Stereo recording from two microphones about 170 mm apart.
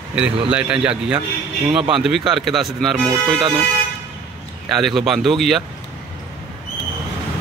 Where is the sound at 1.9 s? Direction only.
5° right (ahead or behind).